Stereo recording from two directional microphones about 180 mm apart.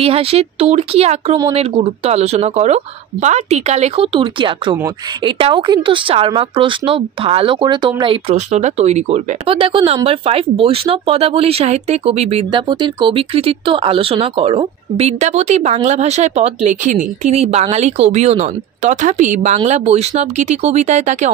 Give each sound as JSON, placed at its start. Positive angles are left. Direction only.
{"t": 0.0, "sound": "speech", "side_deg": -35}